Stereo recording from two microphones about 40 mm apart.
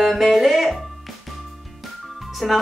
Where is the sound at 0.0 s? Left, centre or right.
Centre.